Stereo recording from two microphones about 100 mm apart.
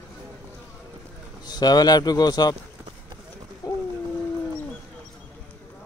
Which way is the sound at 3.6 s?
35° left (ahead or behind).